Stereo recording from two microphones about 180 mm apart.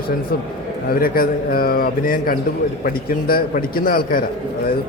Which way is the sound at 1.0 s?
55° left (ahead or behind).